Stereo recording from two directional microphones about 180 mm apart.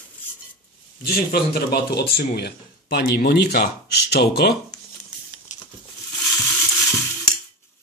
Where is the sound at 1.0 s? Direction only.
60° left (ahead or behind).